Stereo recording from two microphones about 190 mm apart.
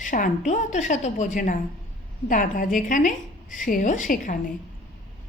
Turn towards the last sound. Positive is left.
turn(degrees=45)  # may be behind; listen again after turning